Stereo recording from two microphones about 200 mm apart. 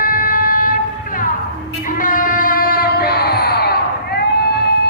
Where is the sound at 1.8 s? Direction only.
40° left (ahead or behind).